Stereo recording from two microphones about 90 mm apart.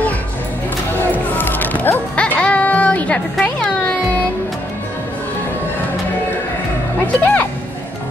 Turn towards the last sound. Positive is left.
turn(degrees=20)  # may be behind; listen again after turning